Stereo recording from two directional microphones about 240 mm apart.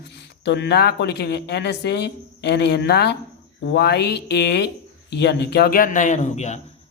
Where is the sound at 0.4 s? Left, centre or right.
Left.